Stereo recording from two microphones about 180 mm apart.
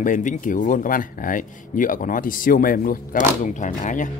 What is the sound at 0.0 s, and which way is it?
Speech, 45° left (ahead or behind).